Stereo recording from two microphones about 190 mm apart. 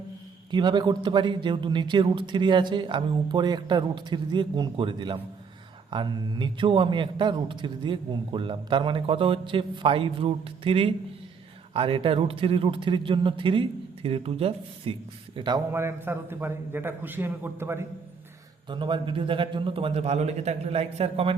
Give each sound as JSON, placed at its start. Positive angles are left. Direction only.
{"t": 0.5, "sound": "a man's voice", "side_deg": -25}
{"t": 15.7, "sound": "a man's voice", "side_deg": -10}
{"t": 18.7, "sound": "a man's voice", "side_deg": -25}